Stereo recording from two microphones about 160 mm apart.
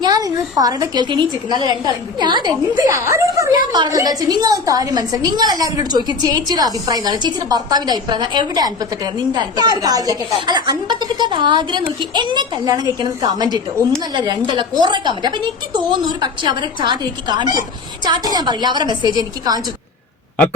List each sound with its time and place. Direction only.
0.0 s a woman's voice: 25° right (ahead or behind)